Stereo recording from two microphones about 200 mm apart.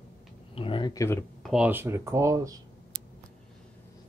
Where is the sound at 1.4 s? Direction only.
5° right (ahead or behind).